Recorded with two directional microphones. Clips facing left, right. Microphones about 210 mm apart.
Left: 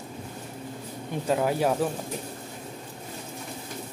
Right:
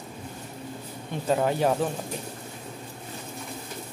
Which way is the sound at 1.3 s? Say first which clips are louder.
Right 1 dB; 5° left (ahead or behind).